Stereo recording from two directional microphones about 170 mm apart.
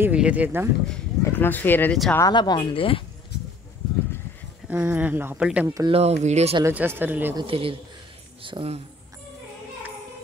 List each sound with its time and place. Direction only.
0.0 s speech: 5° right (ahead or behind)
1.2 s speech: 10° left (ahead or behind)
2.1 s speech: 20° left (ahead or behind)
4.6 s speech: 10° right (ahead or behind)
5.8 s speech: 35° right (ahead or behind)
6.6 s speech: 10° right (ahead or behind)
7.3 s speech: 30° right (ahead or behind)